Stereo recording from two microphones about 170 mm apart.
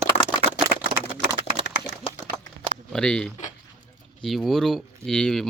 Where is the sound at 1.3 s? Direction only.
35° right (ahead or behind).